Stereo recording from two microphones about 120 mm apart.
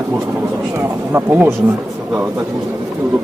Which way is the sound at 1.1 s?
20° right (ahead or behind).